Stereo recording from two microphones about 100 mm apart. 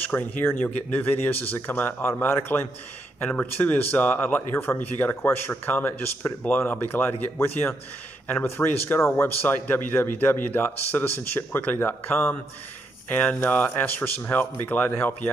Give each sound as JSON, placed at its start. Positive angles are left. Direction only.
{"t": 0.1, "sound": "speech", "side_deg": 20}